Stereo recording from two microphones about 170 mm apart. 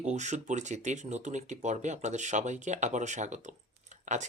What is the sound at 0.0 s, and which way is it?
Speech, 45° right (ahead or behind).